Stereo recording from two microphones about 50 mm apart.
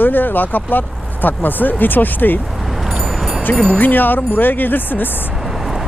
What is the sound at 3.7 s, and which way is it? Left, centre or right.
Speech, left.